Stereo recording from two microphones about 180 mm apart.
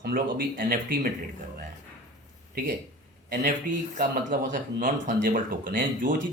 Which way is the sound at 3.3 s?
50° right (ahead or behind).